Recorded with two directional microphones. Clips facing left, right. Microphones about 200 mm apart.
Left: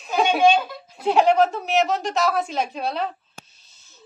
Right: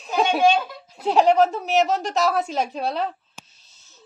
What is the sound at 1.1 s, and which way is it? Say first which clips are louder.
A woman's voice: even; 35° right (ahead or behind).